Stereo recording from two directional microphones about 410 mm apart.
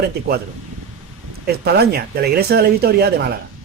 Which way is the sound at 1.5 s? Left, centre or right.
Right.